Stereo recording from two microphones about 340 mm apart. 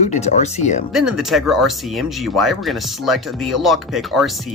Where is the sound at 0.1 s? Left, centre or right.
Centre.